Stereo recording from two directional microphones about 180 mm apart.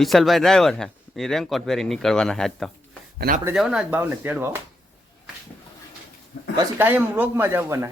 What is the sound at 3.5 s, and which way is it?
Speech, 5° right (ahead or behind).